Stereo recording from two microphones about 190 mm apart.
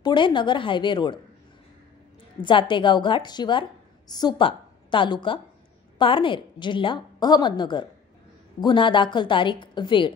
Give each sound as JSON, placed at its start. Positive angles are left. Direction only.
{"t": 0.0, "sound": "a woman's voice", "side_deg": 25}
{"t": 2.4, "sound": "a woman's voice", "side_deg": 25}